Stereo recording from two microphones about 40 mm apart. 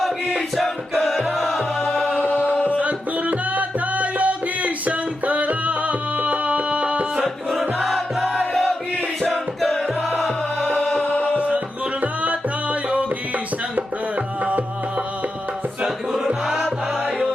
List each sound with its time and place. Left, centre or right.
0.0 s music: centre
2.1 s a capella: left
2.7 s music: right
7.8 s music: centre
11.0 s music: left
12.2 s music: right
14.4 s music: right
15.8 s music: centre